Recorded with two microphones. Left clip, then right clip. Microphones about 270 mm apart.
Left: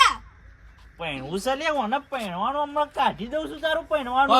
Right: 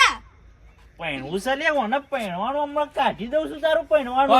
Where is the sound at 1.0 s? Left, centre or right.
Centre.